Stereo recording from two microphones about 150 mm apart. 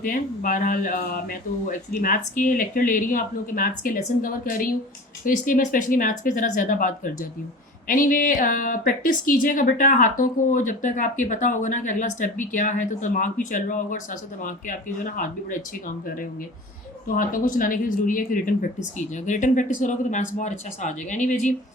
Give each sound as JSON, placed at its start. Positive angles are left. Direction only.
{"t": 0.0, "sound": "a woman's voice", "side_deg": 65}
{"t": 17.1, "sound": "speech", "side_deg": 65}
{"t": 18.9, "sound": "a woman's voice", "side_deg": 55}